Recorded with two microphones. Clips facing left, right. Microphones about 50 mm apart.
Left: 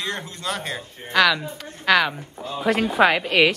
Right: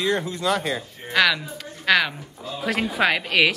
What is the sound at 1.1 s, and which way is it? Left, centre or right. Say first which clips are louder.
A woman's voice: left 2 dB; centre.